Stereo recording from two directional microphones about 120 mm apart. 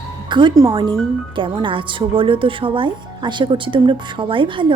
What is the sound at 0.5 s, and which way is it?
Speech, 30° right (ahead or behind).